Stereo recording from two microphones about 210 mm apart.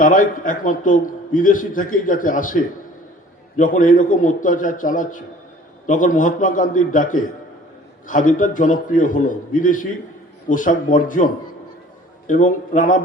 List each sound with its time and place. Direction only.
0.0 s a man's voice: 40° left (ahead or behind)
3.6 s a man's voice: 40° left (ahead or behind)
12.3 s a man's voice: 40° left (ahead or behind)